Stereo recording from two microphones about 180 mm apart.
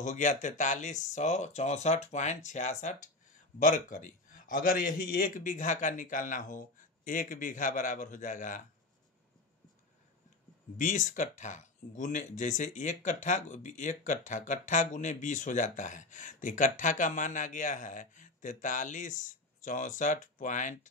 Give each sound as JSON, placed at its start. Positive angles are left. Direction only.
{"t": 0.0, "sound": "speech", "side_deg": 45}
{"t": 10.8, "sound": "speech", "side_deg": 45}